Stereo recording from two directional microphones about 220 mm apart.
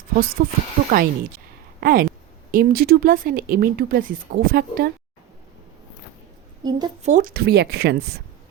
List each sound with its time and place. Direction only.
0.4 s speech: 45° right (ahead or behind)
6.6 s a woman's voice: 20° right (ahead or behind)
7.0 s speech: 35° right (ahead or behind)